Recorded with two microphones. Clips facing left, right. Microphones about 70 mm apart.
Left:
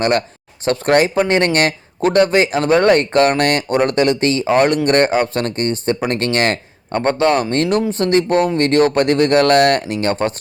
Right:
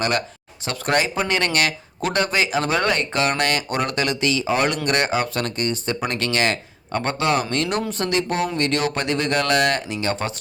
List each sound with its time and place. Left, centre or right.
0.6 s speech: left
8.1 s speech: left